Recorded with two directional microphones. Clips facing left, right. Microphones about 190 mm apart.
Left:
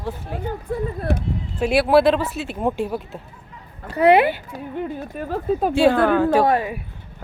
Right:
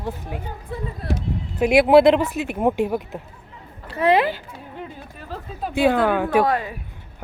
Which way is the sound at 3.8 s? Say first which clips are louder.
Left 5 dB; 35° left (ahead or behind).